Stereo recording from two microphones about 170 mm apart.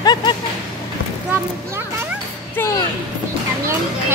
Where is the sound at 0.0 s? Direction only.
25° left (ahead or behind).